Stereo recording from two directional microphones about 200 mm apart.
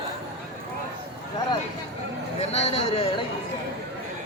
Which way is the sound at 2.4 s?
30° left (ahead or behind).